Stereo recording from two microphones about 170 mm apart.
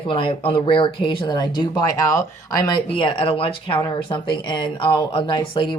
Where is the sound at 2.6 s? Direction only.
30° left (ahead or behind).